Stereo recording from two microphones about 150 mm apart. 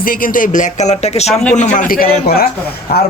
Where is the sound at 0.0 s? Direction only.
70° left (ahead or behind).